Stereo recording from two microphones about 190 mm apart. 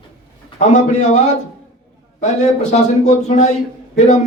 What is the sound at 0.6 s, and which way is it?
Speech, 40° left (ahead or behind).